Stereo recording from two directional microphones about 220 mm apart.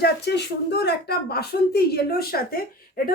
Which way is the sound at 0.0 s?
50° left (ahead or behind).